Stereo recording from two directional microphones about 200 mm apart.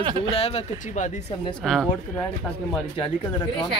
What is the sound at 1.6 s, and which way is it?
Speech, centre (ahead or behind).